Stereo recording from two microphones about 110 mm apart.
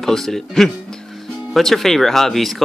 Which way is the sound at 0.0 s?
5° left (ahead or behind).